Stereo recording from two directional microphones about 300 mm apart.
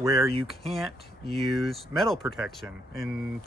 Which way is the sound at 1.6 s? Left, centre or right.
Centre.